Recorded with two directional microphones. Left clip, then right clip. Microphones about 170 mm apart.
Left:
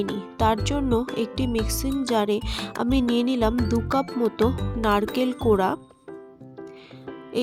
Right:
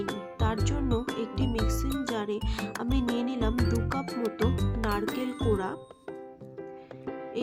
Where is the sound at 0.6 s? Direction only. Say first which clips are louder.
Left 7 dB; 35° left (ahead or behind).